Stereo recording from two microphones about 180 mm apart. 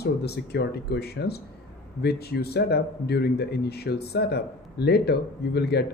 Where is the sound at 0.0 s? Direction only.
65° left (ahead or behind).